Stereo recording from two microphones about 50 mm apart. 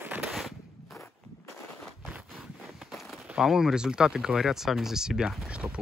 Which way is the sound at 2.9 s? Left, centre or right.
Centre.